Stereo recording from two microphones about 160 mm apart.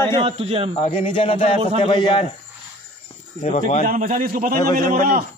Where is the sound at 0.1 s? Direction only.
35° right (ahead or behind).